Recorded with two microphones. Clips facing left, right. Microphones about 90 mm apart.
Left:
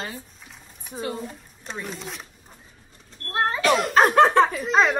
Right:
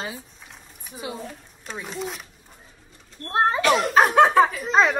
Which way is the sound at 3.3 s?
20° right (ahead or behind).